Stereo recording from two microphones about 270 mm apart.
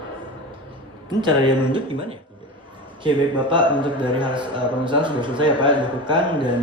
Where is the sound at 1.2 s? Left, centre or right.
Centre.